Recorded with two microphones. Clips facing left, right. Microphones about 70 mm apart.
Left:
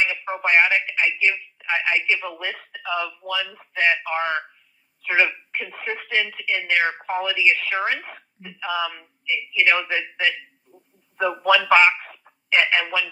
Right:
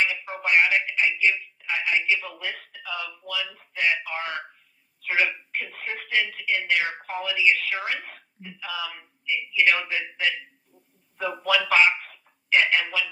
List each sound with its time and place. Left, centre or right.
0.0 s a man's voice: left
10.8 s a sound: left
11.7 s a man's voice: left